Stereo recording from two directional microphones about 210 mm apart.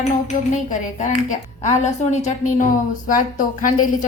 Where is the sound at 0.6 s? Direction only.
35° left (ahead or behind).